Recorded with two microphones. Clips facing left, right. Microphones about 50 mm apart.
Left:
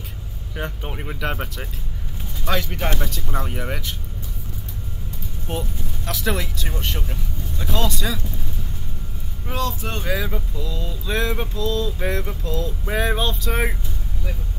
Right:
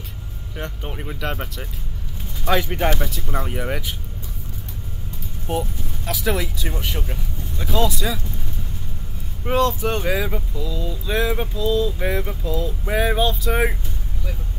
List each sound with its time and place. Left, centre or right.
0.6 s speech: centre
2.4 s speech: centre
3.0 s speech: centre
6.0 s speech: centre
9.5 s speech: right
10.0 s speech: centre